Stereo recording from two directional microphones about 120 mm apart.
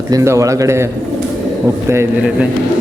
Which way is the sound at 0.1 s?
25° right (ahead or behind).